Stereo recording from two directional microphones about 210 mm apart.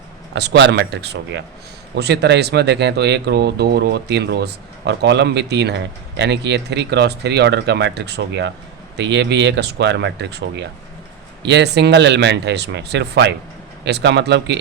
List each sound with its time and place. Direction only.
0.3 s speech: 55° right (ahead or behind)